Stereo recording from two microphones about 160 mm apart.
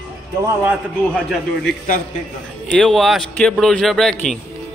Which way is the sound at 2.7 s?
5° left (ahead or behind).